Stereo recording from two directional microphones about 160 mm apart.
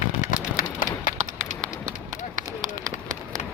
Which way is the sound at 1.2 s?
50° right (ahead or behind).